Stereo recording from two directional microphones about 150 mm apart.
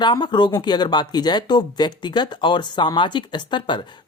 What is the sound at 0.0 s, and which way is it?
Speech, 30° left (ahead or behind).